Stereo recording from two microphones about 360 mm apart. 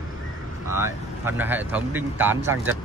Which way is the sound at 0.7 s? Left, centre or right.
Centre.